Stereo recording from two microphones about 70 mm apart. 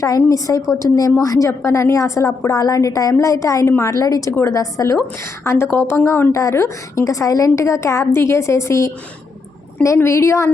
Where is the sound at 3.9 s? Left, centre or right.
Left.